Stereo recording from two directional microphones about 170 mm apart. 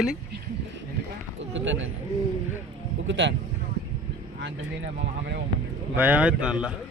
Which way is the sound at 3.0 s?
90° right.